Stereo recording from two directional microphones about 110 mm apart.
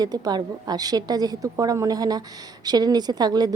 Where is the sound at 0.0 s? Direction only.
40° right (ahead or behind).